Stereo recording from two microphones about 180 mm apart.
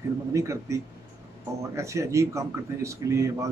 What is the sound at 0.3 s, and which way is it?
Speech, 15° right (ahead or behind).